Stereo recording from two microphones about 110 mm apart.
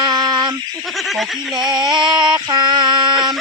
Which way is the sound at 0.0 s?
40° right (ahead or behind).